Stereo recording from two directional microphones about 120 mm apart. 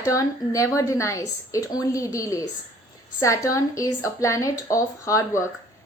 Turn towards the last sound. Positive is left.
turn(degrees=25)  # may be behind; listen again after turning